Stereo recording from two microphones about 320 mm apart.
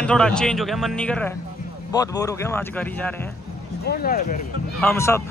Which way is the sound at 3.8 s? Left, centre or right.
Left.